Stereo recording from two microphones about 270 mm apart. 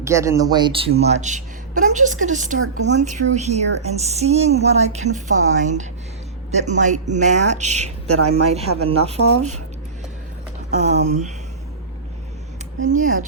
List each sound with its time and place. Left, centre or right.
0.0 s a woman's voice: centre; by 2.6 s right
2.6 s speech: right
3.3 s speech: right
8.0 s a woman's voice: right
8.3 s speech: right
10.8 s speech: right
12.8 s speech: right